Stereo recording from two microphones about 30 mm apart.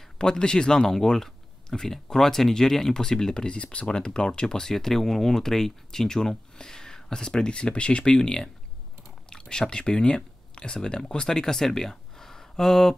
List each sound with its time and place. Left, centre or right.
0.2 s speech: left
0.7 s speech: centre
3.4 s speech: left; by 12.9 s centre